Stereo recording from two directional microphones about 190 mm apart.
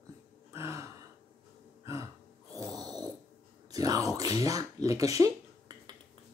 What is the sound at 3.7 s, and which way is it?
Speech, 20° right (ahead or behind).